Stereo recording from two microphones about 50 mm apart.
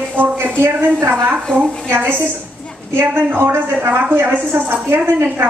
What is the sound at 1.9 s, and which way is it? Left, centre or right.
A woman's voice, right.